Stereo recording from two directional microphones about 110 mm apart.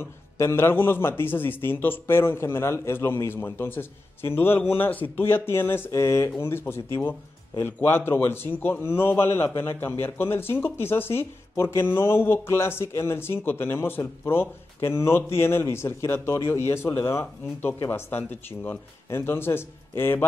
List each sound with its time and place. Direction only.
0.0 s speech: 20° left (ahead or behind)